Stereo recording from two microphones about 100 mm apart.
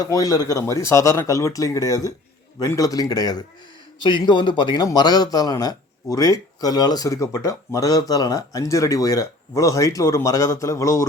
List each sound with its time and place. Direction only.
0.0 s speech: 40° left (ahead or behind)
4.0 s speech: 50° left (ahead or behind); by 11.0 s 30° left (ahead or behind)